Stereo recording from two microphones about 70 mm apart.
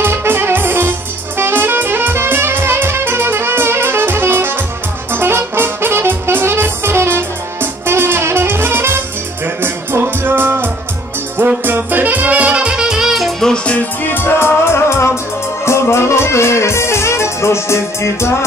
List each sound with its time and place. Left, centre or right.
0.0 s music: right; by 13.5 s centre
14.0 s music: left